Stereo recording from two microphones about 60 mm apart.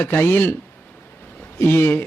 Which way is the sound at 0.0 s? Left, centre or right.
Left.